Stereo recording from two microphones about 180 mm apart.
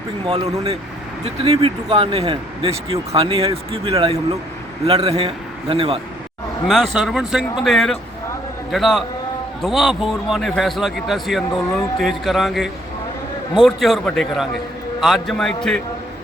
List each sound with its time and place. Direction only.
0.3 s speech: 35° right (ahead or behind)
6.7 s speech: centre (ahead or behind)